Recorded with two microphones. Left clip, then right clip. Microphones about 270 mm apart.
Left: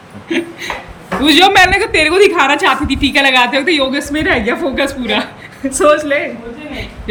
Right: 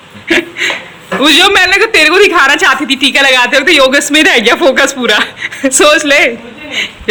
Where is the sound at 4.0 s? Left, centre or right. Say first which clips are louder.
Right 8 dB; centre.